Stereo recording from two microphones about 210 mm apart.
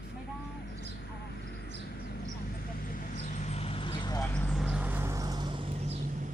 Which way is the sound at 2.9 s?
35° left (ahead or behind).